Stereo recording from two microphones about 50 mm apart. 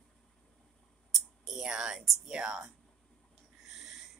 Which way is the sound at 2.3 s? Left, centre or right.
Centre.